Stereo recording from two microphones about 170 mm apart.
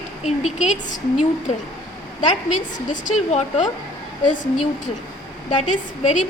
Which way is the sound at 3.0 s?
40° left (ahead or behind).